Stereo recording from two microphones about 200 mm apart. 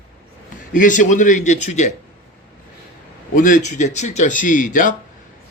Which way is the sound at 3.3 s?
40° left (ahead or behind).